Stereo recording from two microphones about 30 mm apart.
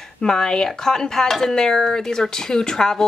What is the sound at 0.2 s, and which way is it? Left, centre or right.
Speech, left.